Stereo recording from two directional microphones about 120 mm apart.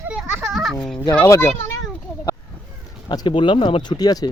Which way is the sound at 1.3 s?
25° left (ahead or behind).